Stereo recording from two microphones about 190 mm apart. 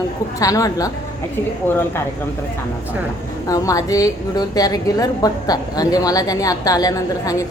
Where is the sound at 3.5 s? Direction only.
20° left (ahead or behind).